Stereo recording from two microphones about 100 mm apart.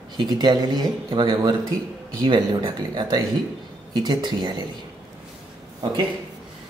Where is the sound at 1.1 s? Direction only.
60° right (ahead or behind).